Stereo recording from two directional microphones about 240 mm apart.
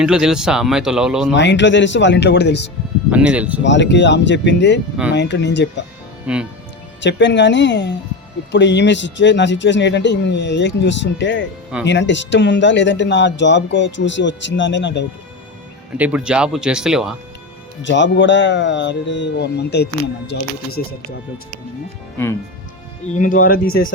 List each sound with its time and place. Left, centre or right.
0.0 s speech: centre
1.4 s speech: left
3.1 s speech: centre
3.6 s speech: left
6.2 s speech: centre
7.0 s speech: left
16.0 s speech: centre
17.8 s speech: left
23.1 s speech: left